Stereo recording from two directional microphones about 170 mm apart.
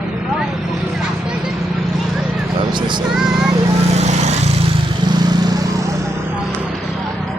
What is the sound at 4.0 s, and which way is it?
Lawn mower, 40° right (ahead or behind).